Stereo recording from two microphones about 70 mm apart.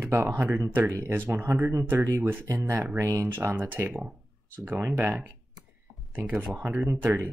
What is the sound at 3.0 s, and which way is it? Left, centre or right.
Speech, right.